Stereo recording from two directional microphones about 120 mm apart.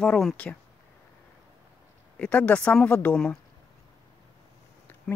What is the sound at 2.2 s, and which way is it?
Speech, 10° left (ahead or behind).